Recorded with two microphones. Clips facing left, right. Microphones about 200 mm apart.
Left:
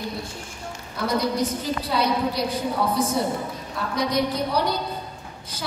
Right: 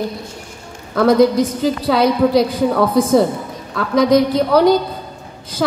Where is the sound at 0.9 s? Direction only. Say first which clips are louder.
Right 12 dB; 90° right.